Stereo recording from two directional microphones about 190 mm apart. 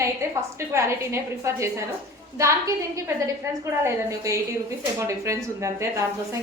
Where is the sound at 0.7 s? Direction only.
15° right (ahead or behind).